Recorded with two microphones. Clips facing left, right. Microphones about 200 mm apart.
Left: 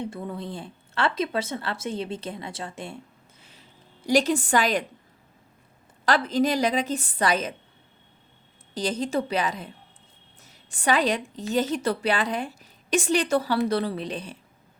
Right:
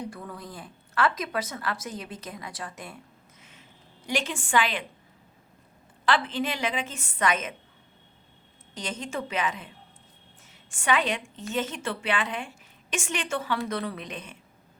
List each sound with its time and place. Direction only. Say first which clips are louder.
0.0 s a woman's voice: left 5 dB; 25° left (ahead or behind)
4.0 s a woman's voice: left 9 dB; 40° left (ahead or behind)
6.1 s a woman's voice: left 4 dB; 40° left (ahead or behind)
8.7 s a woman's voice: left 8 dB; 35° left (ahead or behind)